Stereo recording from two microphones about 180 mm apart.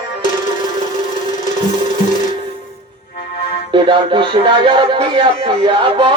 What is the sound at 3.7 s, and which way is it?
Speech, 25° right (ahead or behind).